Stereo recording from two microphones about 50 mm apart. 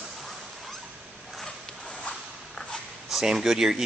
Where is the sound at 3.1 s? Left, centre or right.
Centre.